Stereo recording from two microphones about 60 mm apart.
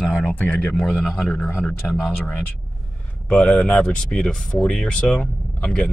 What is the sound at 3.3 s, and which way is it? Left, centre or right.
Speech, centre.